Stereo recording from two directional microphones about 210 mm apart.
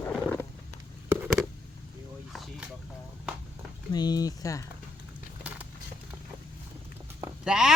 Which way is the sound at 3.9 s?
20° left (ahead or behind).